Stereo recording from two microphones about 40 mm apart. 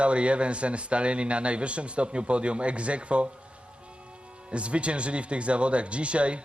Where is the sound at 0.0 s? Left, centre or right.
Right.